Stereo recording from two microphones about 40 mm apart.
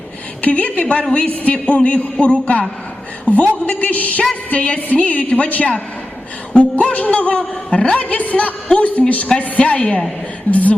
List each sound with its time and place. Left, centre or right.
0.4 s a man's voice: left
6.9 s speech: left